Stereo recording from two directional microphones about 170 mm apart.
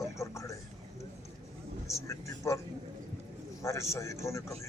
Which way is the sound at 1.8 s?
15° left (ahead or behind).